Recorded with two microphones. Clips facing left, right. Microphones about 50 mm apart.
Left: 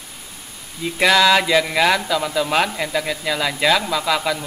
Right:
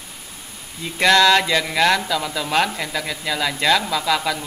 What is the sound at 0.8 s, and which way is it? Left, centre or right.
A man's voice, centre.